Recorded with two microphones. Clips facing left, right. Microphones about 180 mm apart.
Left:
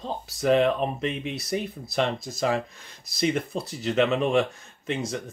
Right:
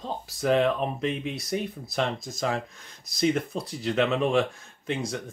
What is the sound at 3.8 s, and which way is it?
Speech, centre (ahead or behind).